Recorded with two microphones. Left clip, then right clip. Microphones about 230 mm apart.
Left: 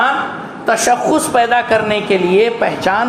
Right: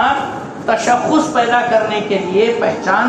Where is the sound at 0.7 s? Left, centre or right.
Left.